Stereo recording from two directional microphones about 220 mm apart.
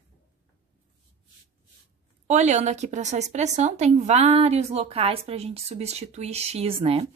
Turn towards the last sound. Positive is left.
turn(degrees=-25)  # may be behind; listen again after turning